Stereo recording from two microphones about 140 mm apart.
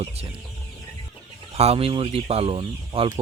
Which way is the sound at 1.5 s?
45° right (ahead or behind).